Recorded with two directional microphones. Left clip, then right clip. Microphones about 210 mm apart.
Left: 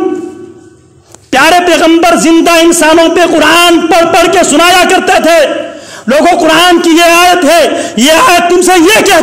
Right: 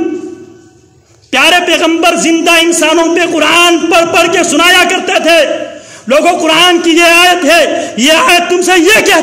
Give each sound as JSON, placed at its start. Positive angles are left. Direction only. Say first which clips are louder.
{"t": 1.3, "sound": "a man's voice", "louder": "left 2 dB", "side_deg": 25}